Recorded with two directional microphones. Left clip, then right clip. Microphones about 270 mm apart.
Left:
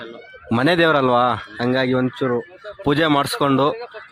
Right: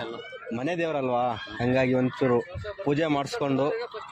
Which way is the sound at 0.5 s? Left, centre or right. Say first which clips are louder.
Left 13 dB; left.